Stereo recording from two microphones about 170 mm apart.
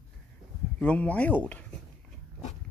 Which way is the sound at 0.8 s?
10° left (ahead or behind).